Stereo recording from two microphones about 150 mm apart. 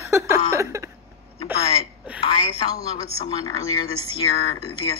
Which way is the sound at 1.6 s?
40° left (ahead or behind).